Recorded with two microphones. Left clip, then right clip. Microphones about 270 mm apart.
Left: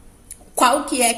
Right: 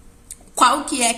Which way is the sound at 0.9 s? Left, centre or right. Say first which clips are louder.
Left 1 dB; centre.